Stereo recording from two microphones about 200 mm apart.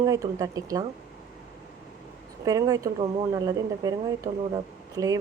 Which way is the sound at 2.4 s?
20° right (ahead or behind).